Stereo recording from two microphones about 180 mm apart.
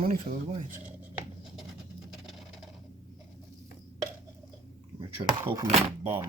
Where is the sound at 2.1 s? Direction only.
Centre (ahead or behind).